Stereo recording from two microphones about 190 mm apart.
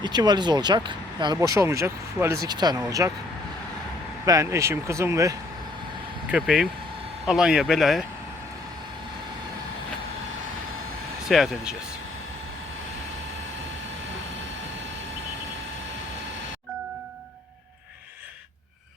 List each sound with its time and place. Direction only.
0.0 s speech: 20° right (ahead or behind)
4.3 s speech: 15° right (ahead or behind)
6.3 s speech: 5° right (ahead or behind)
11.3 s speech: centre (ahead or behind)